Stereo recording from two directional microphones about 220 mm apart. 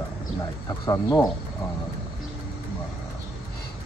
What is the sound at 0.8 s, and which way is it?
Speech, 15° left (ahead or behind).